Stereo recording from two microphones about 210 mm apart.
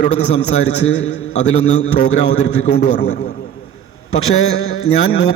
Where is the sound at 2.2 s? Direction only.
55° left (ahead or behind).